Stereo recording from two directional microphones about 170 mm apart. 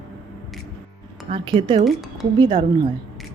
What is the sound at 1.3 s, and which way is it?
Speech, 30° right (ahead or behind).